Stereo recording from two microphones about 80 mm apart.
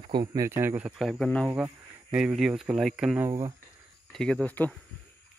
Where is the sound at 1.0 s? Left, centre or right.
Centre.